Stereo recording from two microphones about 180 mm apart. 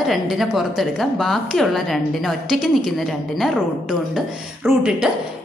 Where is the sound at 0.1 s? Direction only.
Centre (ahead or behind).